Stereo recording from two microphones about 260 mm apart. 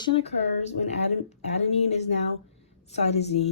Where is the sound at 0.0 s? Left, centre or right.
Left.